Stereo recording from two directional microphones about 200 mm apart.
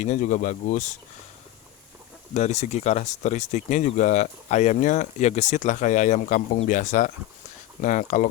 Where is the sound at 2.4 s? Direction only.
35° left (ahead or behind).